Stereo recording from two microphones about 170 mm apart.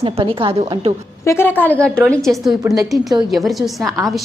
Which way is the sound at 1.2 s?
15° left (ahead or behind).